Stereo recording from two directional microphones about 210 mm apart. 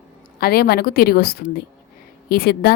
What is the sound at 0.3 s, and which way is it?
A woman's voice, 45° left (ahead or behind).